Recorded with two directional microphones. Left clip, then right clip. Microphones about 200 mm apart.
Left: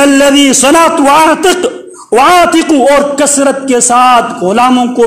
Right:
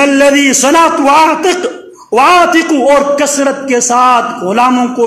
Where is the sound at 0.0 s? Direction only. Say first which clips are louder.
Left 1 dB; 30° left (ahead or behind).